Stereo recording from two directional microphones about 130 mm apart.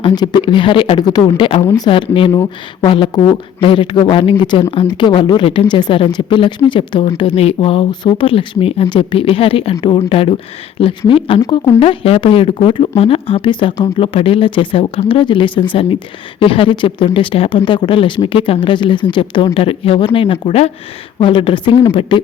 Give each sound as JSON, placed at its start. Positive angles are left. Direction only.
{"t": 0.0, "sound": "speech", "side_deg": 35}
{"t": 11.4, "sound": "speech", "side_deg": 30}
{"t": 11.8, "sound": "speech", "side_deg": 45}